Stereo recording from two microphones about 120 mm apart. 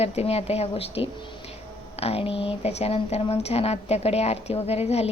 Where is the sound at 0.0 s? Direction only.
60° left (ahead or behind).